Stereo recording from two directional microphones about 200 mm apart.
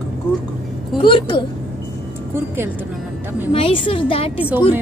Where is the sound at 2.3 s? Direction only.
10° right (ahead or behind).